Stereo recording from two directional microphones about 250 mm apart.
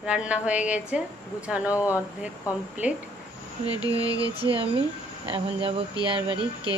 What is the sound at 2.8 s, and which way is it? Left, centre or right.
Speech, centre.